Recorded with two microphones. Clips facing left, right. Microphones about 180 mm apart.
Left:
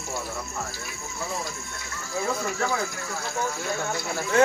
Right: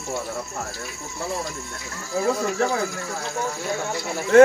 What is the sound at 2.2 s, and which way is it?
Speech, 35° right (ahead or behind).